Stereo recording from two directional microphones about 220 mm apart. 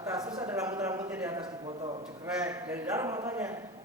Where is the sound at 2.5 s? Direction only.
10° right (ahead or behind).